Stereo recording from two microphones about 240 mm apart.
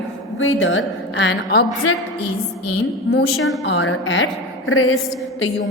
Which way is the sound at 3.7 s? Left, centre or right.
Left.